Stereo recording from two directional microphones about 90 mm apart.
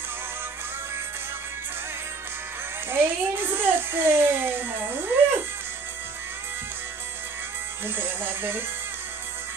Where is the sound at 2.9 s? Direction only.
25° right (ahead or behind).